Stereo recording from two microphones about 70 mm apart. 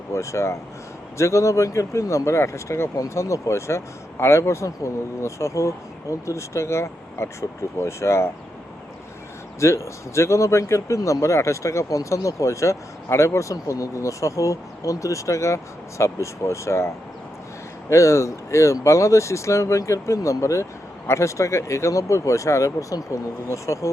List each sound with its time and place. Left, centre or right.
0.1 s speech: left
2.9 s speech: left
9.6 s speech: left